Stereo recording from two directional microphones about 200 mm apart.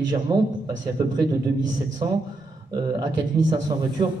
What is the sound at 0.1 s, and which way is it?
Speech, 20° right (ahead or behind).